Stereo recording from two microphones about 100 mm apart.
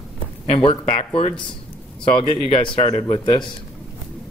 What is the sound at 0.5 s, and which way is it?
Speech, 65° left (ahead or behind).